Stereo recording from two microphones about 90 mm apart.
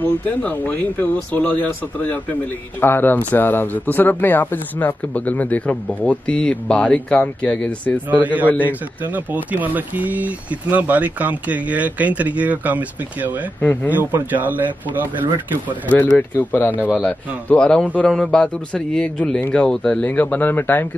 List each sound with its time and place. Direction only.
0.0 s speech: 20° left (ahead or behind)
8.1 s speech: 15° right (ahead or behind)
15.9 s speech: 20° left (ahead or behind)